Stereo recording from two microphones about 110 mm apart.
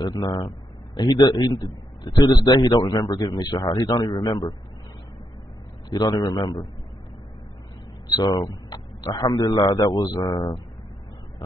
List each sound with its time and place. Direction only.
0.0 s a man's voice: 35° left (ahead or behind)
5.9 s a man's voice: 40° left (ahead or behind)
8.2 s a man's voice: 35° left (ahead or behind)